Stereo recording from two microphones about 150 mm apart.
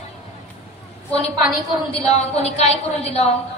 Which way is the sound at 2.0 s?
45° left (ahead or behind).